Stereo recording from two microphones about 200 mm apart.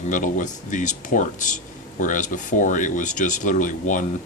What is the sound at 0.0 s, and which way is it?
Speech, 40° left (ahead or behind).